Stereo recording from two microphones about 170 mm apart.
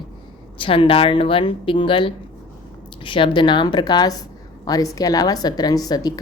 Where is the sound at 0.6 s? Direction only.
30° left (ahead or behind).